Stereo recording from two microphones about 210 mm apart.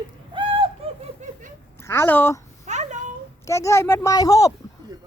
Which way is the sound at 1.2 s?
35° right (ahead or behind).